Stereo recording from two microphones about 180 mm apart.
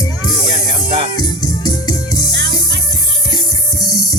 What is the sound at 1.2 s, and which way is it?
Music, 20° left (ahead or behind).